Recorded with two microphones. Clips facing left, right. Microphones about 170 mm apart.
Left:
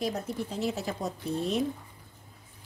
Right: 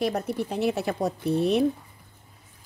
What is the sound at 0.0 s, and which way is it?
A woman's voice, 65° right (ahead or behind).